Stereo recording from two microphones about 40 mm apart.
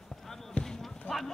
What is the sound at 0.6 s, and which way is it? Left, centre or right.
Basketball bounce, centre.